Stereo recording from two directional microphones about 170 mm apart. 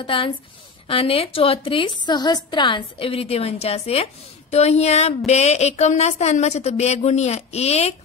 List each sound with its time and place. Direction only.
0.0 s a woman's voice: 30° left (ahead or behind)